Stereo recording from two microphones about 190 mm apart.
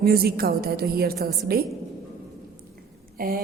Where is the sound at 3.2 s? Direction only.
50° right (ahead or behind).